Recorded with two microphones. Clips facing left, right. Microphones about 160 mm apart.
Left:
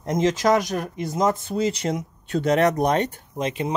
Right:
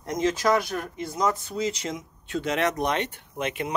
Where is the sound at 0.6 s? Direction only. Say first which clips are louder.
Left 4 dB; 20° left (ahead or behind).